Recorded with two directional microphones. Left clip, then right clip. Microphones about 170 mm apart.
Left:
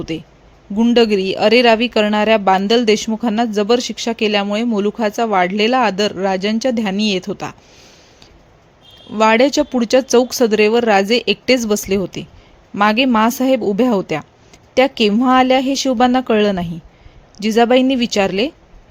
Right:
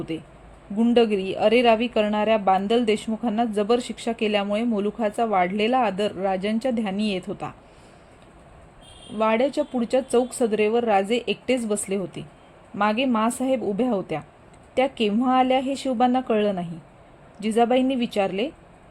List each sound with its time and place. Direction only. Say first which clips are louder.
0.1 s speech: left 6 dB; 30° left (ahead or behind)
9.1 s speech: left 9 dB; 40° left (ahead or behind)